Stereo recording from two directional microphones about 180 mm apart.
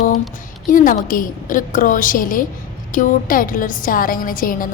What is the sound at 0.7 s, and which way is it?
A woman's voice, 50° left (ahead or behind).